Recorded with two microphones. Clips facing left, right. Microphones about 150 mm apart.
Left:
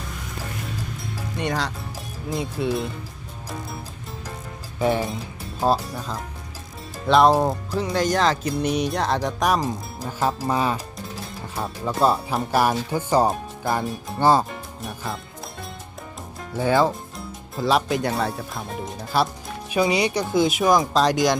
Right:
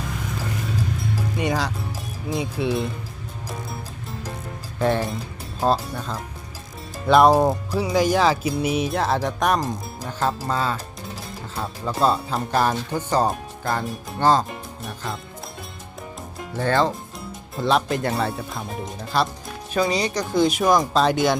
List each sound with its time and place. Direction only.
1.4 s speech: centre (ahead or behind)
4.8 s speech: 10° left (ahead or behind)
11.6 s speech: centre (ahead or behind)
14.8 s music: centre (ahead or behind)
16.6 s speech: 10° left (ahead or behind)